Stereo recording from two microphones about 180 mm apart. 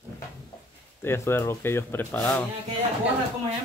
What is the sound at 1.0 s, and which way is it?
Speech, 15° left (ahead or behind).